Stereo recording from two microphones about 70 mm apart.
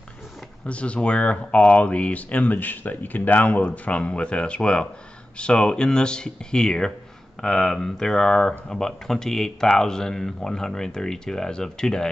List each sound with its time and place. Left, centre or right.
0.7 s speech: centre